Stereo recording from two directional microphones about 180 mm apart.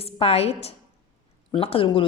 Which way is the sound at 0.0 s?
35° left (ahead or behind).